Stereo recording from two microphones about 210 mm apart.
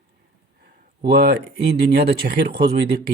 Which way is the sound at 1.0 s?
50° right (ahead or behind).